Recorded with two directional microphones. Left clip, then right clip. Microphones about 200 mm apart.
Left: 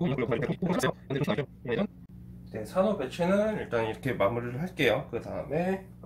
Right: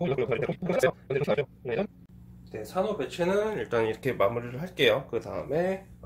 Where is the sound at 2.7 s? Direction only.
55° right (ahead or behind).